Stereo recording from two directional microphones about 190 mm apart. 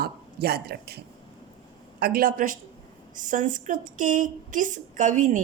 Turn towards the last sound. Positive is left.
turn(degrees=-40)  # may be behind; listen again after turning